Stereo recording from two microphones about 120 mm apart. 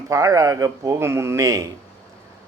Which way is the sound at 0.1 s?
30° right (ahead or behind).